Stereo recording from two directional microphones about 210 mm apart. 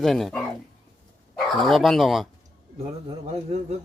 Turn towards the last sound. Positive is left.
turn(degrees=-30)  # may be behind; listen again after turning